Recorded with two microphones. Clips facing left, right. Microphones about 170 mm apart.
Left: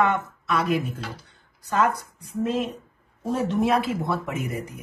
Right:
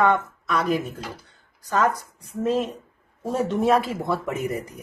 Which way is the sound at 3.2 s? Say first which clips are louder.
Even; 40° right (ahead or behind).